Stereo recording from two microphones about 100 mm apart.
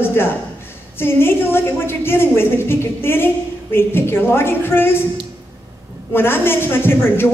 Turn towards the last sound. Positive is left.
turn(degrees=25)  # may be behind; listen again after turning